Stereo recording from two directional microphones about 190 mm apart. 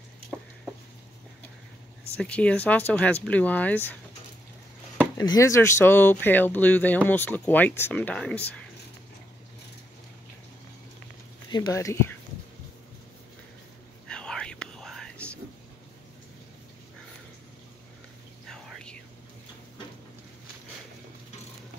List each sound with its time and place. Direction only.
2.1 s speech: 5° left (ahead or behind)
5.1 s speech: 20° left (ahead or behind)
11.5 s speech: 20° left (ahead or behind)
14.0 s whispering: 5° left (ahead or behind)
18.5 s whispering: 5° left (ahead or behind)